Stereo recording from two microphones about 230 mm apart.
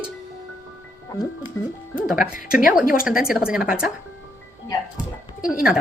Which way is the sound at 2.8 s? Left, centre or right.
Left.